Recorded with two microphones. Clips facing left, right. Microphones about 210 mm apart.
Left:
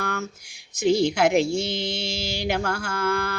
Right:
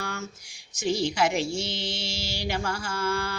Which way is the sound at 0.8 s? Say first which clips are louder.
Left 6 dB; 60° left (ahead or behind).